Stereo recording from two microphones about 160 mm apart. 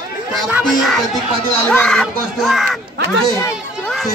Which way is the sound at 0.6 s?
Centre (ahead or behind).